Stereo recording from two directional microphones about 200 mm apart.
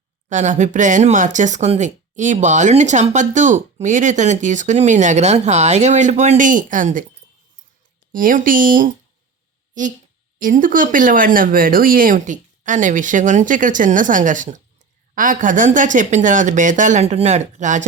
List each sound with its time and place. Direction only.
0.3 s speech: 35° right (ahead or behind)
8.1 s speech: 45° right (ahead or behind)